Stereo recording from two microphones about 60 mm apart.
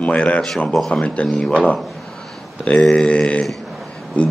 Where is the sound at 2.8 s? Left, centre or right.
Centre.